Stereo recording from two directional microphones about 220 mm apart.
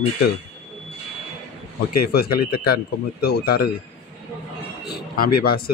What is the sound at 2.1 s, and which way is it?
Speech, 45° left (ahead or behind).